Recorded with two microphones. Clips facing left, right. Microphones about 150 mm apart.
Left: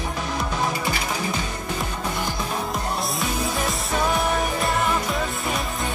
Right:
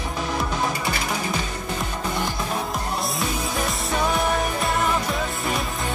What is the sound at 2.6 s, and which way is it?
Music, centre (ahead or behind).